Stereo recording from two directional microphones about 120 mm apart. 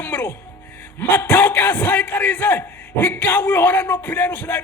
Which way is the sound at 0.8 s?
15° left (ahead or behind).